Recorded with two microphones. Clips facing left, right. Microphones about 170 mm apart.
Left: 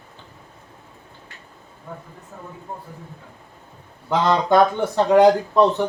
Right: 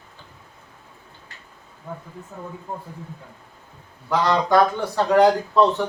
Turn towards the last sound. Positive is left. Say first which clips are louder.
# left 1 dB
turn(degrees=20)  # may be behind; listen again after turning